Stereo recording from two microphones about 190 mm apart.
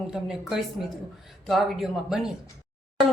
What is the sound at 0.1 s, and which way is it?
Speech, centre (ahead or behind).